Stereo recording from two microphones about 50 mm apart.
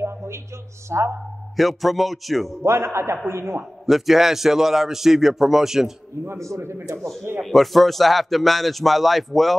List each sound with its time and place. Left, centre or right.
0.0 s a sound: right
0.8 s a man's voice: right
1.6 s speech: centre
2.6 s a man's voice: right
3.8 s a man's voice: centre
6.2 s a man's voice: right
7.0 s speech: centre